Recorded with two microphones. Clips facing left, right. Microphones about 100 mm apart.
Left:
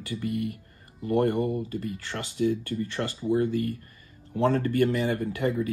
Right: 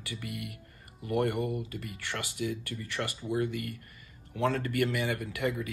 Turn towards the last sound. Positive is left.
turn(degrees=30)  # may be behind; listen again after turning